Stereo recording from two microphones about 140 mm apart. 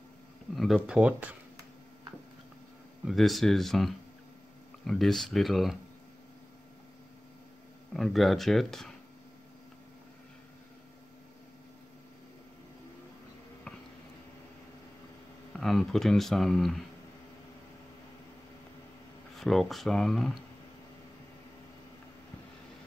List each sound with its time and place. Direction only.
0.6 s speech: centre (ahead or behind)
3.1 s speech: centre (ahead or behind)
7.9 s speech: centre (ahead or behind)
15.5 s speech: centre (ahead or behind)
19.3 s speech: centre (ahead or behind)